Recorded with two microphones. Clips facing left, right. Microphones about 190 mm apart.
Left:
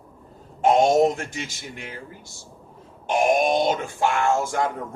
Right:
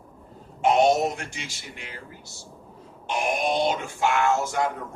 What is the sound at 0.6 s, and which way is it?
A man's voice, 50° left (ahead or behind).